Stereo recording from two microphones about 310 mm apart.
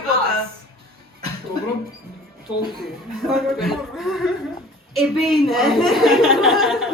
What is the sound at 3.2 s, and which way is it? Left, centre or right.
A woman's voice, centre.